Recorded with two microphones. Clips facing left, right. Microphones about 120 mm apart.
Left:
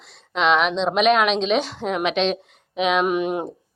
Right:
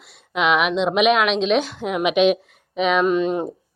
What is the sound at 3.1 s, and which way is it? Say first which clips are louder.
Speech: right 3 dB; 10° left (ahead or behind).